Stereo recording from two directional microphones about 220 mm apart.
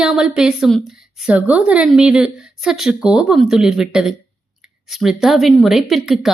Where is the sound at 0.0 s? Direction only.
5° right (ahead or behind).